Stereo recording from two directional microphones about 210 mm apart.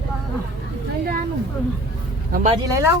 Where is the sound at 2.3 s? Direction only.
35° right (ahead or behind).